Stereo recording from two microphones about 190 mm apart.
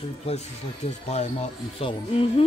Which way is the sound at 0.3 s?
35° left (ahead or behind).